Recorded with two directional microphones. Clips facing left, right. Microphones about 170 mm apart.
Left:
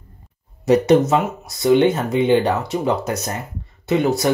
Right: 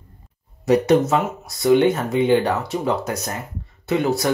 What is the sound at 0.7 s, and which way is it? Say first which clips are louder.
Speech: left 2 dB; 20° left (ahead or behind).